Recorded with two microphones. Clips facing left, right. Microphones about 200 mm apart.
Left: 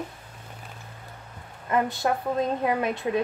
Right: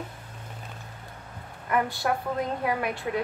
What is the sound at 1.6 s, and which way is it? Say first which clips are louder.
A woman's voice: left 2 dB; 20° left (ahead or behind).